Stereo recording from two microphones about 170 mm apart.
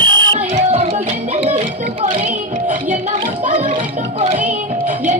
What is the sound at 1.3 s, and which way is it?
Music, 40° right (ahead or behind).